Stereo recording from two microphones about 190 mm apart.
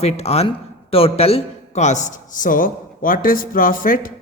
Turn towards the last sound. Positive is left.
turn(degrees=45)  # may be behind; listen again after turning